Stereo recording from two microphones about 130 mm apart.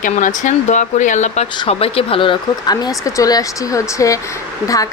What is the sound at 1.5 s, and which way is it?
A woman's voice, 45° left (ahead or behind).